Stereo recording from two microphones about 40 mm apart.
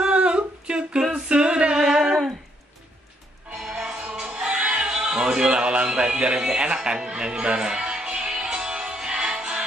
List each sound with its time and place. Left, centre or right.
0.0 s humming: right
1.1 s a capella: right
3.5 s music: centre
3.8 s music: right